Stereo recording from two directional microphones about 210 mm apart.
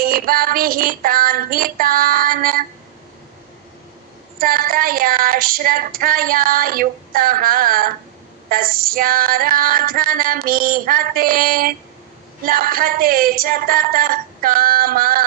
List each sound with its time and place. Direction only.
0.0 s female singing: 45° right (ahead or behind)
4.4 s female singing: 45° right (ahead or behind)